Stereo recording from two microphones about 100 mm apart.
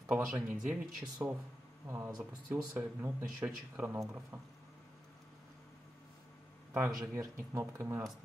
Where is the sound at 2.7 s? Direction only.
20° right (ahead or behind).